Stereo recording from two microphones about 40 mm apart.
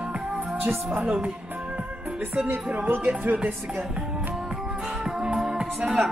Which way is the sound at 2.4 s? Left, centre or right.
Right.